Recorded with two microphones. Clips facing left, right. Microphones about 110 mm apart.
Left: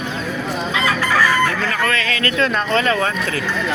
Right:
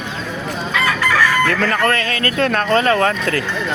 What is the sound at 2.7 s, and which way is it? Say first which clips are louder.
Speech: right 6 dB; 40° right (ahead or behind).